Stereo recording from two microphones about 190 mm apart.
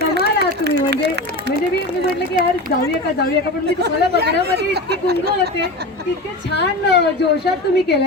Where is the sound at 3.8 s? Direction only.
60° right (ahead or behind).